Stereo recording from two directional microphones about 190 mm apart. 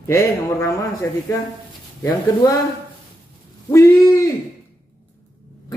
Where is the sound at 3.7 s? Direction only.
15° left (ahead or behind).